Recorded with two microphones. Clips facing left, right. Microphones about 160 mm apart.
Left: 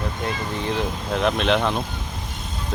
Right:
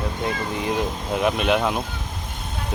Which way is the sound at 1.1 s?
10° right (ahead or behind).